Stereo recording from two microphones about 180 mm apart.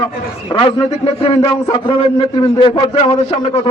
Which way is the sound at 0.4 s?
30° left (ahead or behind).